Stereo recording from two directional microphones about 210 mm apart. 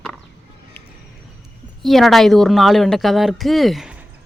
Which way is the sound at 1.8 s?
Centre (ahead or behind).